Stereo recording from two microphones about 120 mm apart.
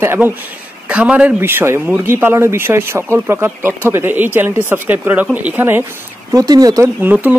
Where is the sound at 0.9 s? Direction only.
10° right (ahead or behind).